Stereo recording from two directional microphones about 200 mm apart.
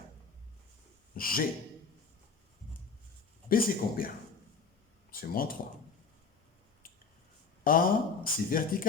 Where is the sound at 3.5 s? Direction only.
45° left (ahead or behind).